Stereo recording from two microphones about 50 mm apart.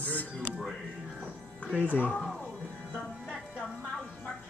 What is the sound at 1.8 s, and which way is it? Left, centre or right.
Speech, left.